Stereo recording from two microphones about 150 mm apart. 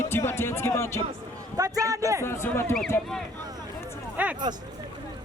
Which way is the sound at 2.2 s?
15° left (ahead or behind).